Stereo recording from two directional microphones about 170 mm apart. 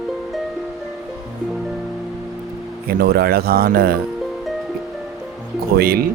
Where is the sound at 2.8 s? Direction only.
65° right (ahead or behind).